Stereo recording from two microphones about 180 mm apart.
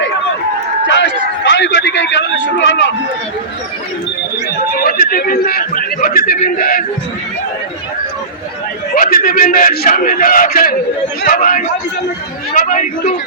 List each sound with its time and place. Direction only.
0.9 s a sound: 85° left
4.7 s a man's voice: 55° left (ahead or behind)
9.0 s a man's voice: 50° left (ahead or behind)